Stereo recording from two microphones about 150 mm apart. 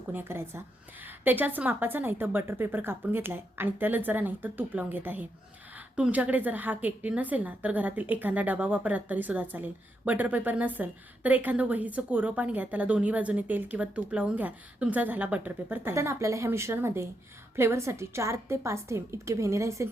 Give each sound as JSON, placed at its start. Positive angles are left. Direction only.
{"t": 0.1, "sound": "a woman's voice", "side_deg": -15}